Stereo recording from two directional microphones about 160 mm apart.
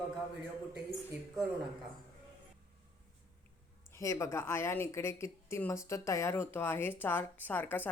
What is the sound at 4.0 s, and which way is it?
A woman's voice, 20° left (ahead or behind).